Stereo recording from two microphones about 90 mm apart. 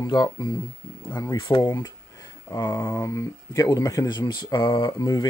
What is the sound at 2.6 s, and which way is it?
Speech, 25° left (ahead or behind).